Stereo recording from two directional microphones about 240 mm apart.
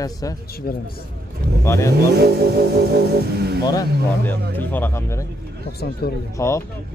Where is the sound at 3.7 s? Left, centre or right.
Centre.